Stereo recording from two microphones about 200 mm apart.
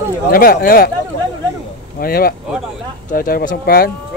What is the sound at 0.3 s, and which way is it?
Speech, 45° left (ahead or behind).